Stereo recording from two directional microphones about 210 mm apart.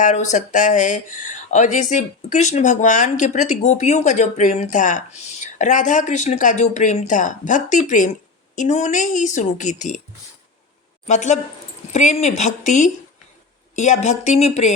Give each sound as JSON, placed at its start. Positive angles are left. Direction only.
{"t": 0.0, "sound": "speech", "side_deg": 35}
{"t": 11.0, "sound": "speech", "side_deg": 35}